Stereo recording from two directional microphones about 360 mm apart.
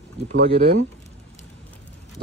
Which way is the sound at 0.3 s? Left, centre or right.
Right.